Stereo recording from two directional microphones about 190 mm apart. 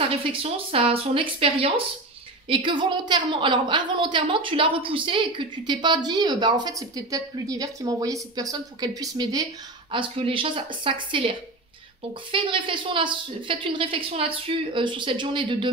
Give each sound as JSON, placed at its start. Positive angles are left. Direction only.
{"t": 0.1, "sound": "a woman's voice", "side_deg": -30}